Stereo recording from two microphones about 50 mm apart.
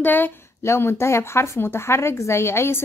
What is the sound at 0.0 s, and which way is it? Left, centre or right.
Speech, left.